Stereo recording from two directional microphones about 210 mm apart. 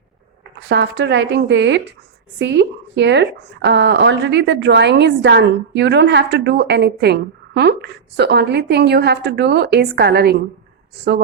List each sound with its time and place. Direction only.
0.7 s a woman's voice: 55° right (ahead or behind)